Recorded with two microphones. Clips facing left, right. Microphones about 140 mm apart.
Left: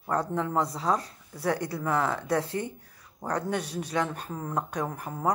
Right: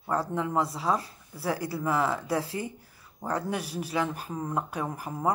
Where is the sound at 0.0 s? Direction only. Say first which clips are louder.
Left 1 dB; 5° right (ahead or behind).